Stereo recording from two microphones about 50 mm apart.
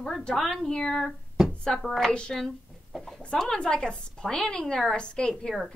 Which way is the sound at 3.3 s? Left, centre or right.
Centre.